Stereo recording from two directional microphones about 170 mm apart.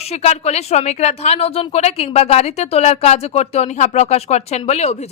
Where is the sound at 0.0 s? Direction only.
40° left (ahead or behind).